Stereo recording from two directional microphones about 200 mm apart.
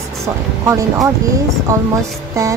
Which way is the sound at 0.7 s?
15° right (ahead or behind).